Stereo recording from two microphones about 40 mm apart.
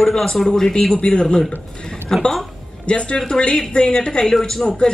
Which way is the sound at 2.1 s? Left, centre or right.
Centre.